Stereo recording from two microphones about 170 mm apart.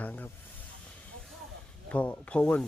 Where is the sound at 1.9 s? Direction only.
10° left (ahead or behind).